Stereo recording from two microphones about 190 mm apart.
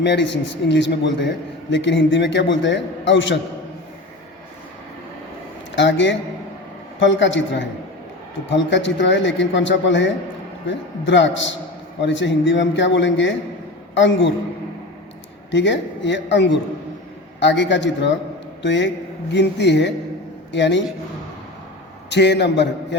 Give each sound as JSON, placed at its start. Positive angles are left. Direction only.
{"t": 0.0, "sound": "a man's voice", "side_deg": 70}
{"t": 5.7, "sound": "a man's voice", "side_deg": 70}
{"t": 15.5, "sound": "a man's voice", "side_deg": 70}
{"t": 22.1, "sound": "a man's voice", "side_deg": 65}